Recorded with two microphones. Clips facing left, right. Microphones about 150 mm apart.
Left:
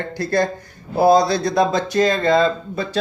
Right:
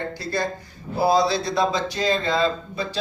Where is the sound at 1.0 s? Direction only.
45° left (ahead or behind).